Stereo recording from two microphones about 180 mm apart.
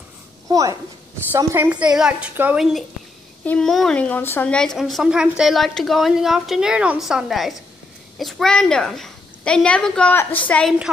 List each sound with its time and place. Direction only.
0.5 s a woman's voice: 20° right (ahead or behind); by 10.9 s centre (ahead or behind)